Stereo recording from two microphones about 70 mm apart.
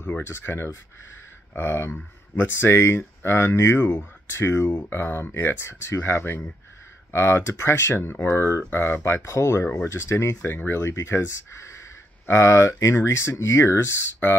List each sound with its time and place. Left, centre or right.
0.3 s speech: left
10.4 s speech: left